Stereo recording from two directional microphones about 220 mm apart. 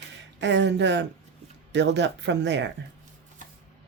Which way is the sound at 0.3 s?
55° right (ahead or behind).